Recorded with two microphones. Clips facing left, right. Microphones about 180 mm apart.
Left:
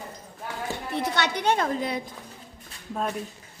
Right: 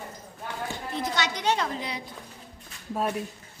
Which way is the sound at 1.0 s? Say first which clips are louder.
Left 3 dB; 60° left (ahead or behind).